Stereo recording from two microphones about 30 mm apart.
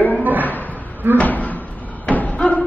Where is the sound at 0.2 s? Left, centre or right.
Right.